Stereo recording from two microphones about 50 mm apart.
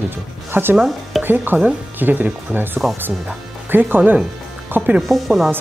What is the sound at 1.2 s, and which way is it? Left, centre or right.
Speech, right.